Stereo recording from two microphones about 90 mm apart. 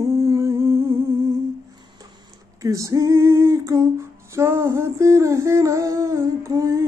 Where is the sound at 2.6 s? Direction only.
40° right (ahead or behind).